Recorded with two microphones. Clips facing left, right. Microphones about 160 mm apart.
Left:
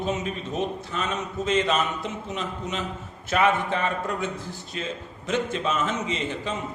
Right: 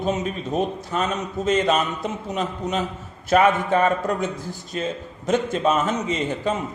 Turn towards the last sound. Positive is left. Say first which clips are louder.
# right 5 dB
turn(degrees=-45)  # may be behind; listen again after turning